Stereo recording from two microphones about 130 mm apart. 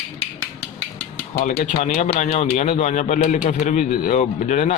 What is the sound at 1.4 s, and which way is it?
Speech, 65° left (ahead or behind).